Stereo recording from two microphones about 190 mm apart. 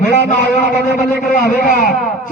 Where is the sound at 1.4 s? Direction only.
50° left (ahead or behind).